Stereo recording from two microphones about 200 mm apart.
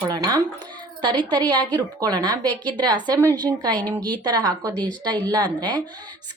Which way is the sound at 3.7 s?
5° left (ahead or behind).